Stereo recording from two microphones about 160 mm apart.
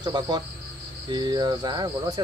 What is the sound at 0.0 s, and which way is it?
Speech, 25° right (ahead or behind).